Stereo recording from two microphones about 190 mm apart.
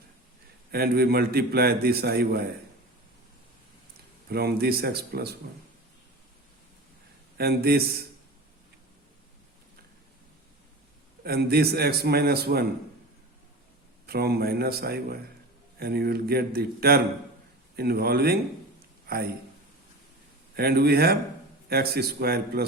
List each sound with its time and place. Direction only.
0.7 s a man's voice: 55° right (ahead or behind)
4.3 s a man's voice: 55° right (ahead or behind)
7.3 s a man's voice: 55° right (ahead or behind)
11.2 s a man's voice: 55° right (ahead or behind)
14.1 s a man's voice: 55° right (ahead or behind)
20.6 s a man's voice: 55° right (ahead or behind)